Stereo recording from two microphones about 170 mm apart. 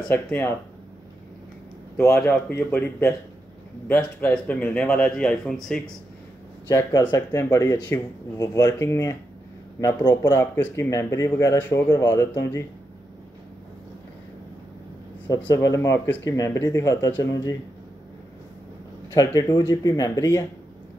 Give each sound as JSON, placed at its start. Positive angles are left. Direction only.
{"t": 0.1, "sound": "speech", "side_deg": 10}
{"t": 2.0, "sound": "speech", "side_deg": 15}
{"t": 6.7, "sound": "speech", "side_deg": 20}
{"t": 15.5, "sound": "speech", "side_deg": 20}
{"t": 19.1, "sound": "speech", "side_deg": 20}